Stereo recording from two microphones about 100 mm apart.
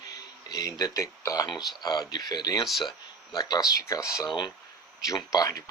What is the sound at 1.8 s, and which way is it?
A man's voice, 45° left (ahead or behind).